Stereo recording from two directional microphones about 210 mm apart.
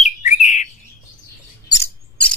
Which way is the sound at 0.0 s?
35° left (ahead or behind).